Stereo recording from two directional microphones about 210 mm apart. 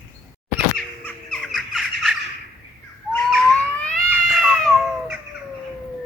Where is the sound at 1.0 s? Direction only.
Centre (ahead or behind).